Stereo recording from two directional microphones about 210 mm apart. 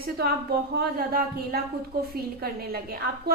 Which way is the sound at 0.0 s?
50° right (ahead or behind).